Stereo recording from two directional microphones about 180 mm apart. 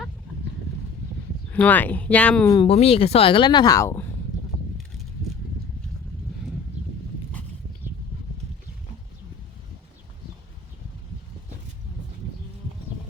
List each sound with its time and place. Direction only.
1.5 s speech: 10° left (ahead or behind)
2.5 s speech: 30° left (ahead or behind)